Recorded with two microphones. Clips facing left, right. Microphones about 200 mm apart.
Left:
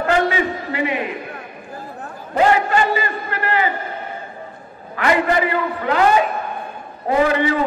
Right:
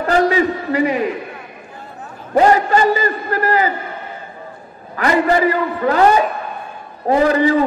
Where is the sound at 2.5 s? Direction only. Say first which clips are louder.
Right 3 dB; 40° right (ahead or behind).